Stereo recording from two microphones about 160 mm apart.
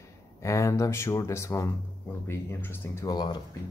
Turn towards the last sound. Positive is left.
turn(degrees=25)  # may be behind; listen again after turning